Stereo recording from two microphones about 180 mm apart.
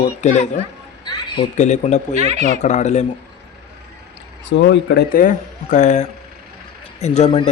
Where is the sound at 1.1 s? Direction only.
25° left (ahead or behind).